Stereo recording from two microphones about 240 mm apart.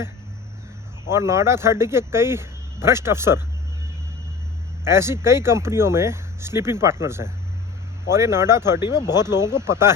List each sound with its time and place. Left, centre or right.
1.1 s speech: centre
4.9 s speech: centre
8.8 s speech: centre
9.3 s speech: centre